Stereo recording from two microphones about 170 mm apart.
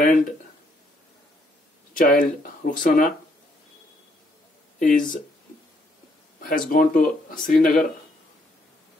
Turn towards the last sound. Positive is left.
turn(degrees=55)  # may be behind; listen again after turning